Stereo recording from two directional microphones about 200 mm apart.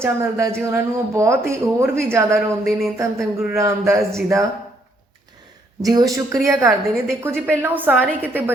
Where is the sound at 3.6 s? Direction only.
15° right (ahead or behind).